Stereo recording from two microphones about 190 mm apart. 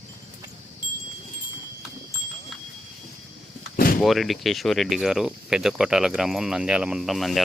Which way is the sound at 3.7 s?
50° left (ahead or behind).